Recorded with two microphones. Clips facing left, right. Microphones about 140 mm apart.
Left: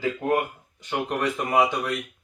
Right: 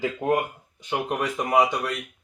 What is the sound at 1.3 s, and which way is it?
Speech, 5° right (ahead or behind).